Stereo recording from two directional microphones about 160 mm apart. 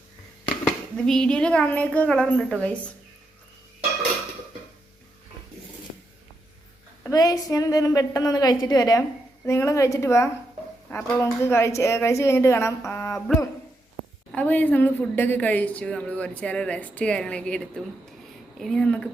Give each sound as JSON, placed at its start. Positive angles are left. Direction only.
{"t": 0.4, "sound": "speech", "side_deg": 5}
{"t": 7.0, "sound": "a woman's voice", "side_deg": 20}
{"t": 14.3, "sound": "a woman's voice", "side_deg": 10}